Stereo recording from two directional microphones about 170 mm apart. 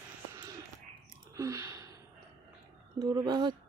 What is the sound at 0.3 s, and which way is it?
Music, 20° right (ahead or behind).